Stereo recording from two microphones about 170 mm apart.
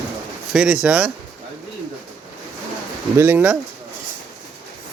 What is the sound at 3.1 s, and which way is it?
Speech, 10° right (ahead or behind).